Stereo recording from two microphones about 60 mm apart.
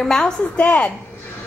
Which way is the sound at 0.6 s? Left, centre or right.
Left.